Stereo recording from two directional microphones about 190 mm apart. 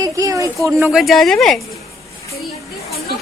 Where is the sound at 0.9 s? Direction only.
Centre (ahead or behind).